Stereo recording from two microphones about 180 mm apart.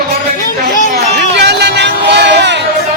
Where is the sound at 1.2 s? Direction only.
70° right (ahead or behind).